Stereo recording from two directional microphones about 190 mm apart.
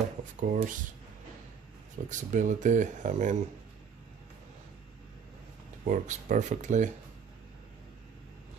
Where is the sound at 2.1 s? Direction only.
40° right (ahead or behind).